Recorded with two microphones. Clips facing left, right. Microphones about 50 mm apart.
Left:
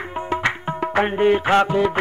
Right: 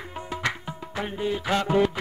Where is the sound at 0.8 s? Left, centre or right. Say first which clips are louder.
Left 13 dB; left.